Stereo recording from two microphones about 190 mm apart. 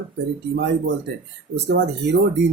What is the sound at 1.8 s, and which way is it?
Speech, 65° right (ahead or behind).